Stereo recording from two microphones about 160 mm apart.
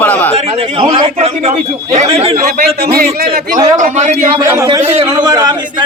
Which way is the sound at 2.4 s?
70° right (ahead or behind).